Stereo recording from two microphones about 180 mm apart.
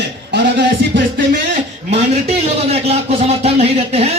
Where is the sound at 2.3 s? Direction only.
35° right (ahead or behind).